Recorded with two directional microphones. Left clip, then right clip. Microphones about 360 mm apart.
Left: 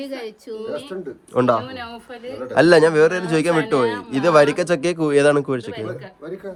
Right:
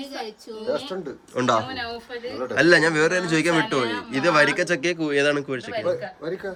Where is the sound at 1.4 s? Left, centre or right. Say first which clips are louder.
Left 3 dB; centre.